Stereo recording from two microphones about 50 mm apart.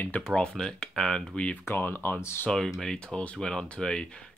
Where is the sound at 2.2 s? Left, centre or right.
Left.